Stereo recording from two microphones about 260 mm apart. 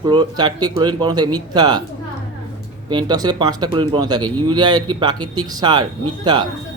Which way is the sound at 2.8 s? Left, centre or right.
Centre.